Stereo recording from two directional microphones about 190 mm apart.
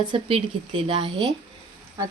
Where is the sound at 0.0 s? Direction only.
25° right (ahead or behind).